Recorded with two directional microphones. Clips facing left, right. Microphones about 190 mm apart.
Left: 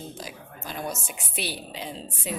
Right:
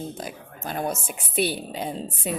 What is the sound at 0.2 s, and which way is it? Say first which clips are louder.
A woman's voice: right 4 dB; 55° right (ahead or behind).